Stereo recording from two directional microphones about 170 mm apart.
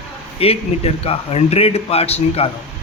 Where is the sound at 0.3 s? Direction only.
35° left (ahead or behind).